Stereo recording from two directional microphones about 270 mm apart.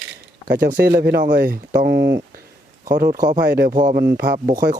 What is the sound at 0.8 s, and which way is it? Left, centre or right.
Speech, right.